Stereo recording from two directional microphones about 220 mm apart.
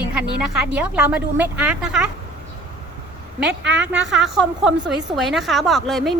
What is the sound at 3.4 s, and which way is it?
Speech, 55° right (ahead or behind).